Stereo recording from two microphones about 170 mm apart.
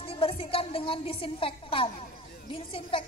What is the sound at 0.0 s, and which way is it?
A woman's voice, 35° left (ahead or behind).